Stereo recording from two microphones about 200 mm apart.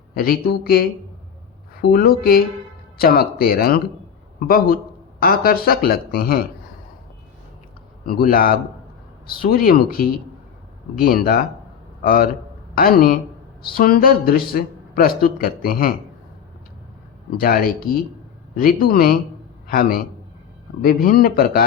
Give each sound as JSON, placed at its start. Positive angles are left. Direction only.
{"t": 0.1, "sound": "a man's voice", "side_deg": 50}
{"t": 8.0, "sound": "a man's voice", "side_deg": 45}
{"t": 17.4, "sound": "a man's voice", "side_deg": 45}